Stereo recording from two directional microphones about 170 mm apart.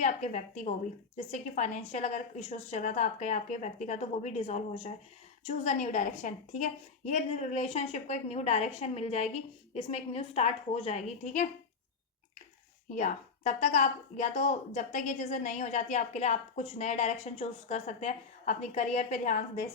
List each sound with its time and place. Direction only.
0.0 s a woman's voice: 45° left (ahead or behind)
12.9 s a woman's voice: 45° left (ahead or behind)